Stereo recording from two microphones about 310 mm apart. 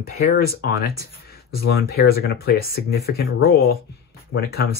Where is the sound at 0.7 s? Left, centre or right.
Left.